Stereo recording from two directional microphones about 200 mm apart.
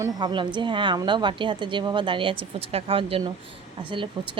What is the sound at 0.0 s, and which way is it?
Speech, 20° right (ahead or behind).